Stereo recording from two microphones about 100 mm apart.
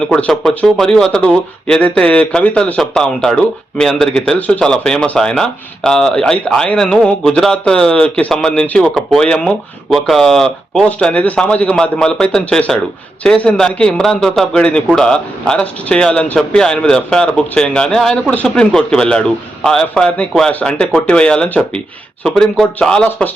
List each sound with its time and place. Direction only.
0.1 s speech: 5° left (ahead or behind)